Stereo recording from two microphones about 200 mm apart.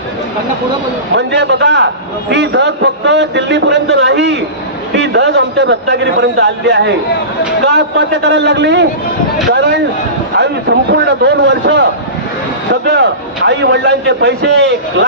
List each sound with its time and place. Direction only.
1.1 s a man's voice: 60° right (ahead or behind)